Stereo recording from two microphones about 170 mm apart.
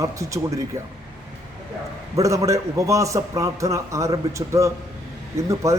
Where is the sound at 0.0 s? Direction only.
20° right (ahead or behind).